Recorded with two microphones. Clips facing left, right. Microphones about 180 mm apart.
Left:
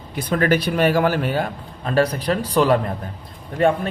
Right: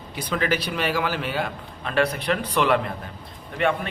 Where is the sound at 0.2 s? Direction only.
50° left (ahead or behind).